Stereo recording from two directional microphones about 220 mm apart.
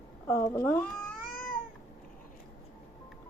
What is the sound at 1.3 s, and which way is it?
Cat, 40° left (ahead or behind).